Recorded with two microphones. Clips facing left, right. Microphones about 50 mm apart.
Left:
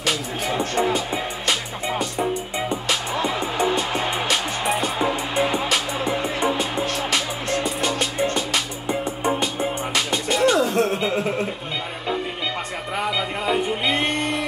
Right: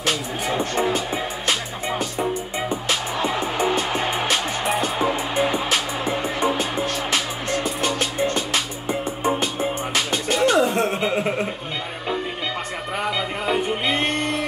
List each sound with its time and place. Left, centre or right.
0.0 s speech: centre
0.8 s music: centre
3.3 s music: centre
10.6 s music: right
12.9 s music: centre